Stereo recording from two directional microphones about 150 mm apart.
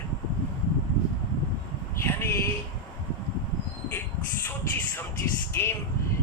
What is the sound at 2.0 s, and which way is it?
Speech, 15° left (ahead or behind).